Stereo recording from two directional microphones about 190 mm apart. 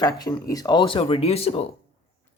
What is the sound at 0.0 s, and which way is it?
Speech, 20° left (ahead or behind).